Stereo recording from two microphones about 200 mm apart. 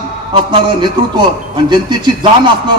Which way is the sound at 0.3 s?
25° right (ahead or behind).